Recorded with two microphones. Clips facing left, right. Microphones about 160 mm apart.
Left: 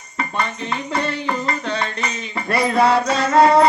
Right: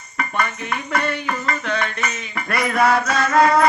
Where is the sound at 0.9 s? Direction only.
25° left (ahead or behind).